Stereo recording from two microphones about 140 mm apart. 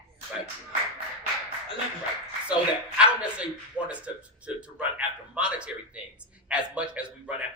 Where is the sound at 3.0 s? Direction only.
10° right (ahead or behind).